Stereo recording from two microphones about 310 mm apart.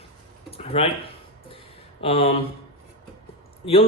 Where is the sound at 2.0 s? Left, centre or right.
Centre.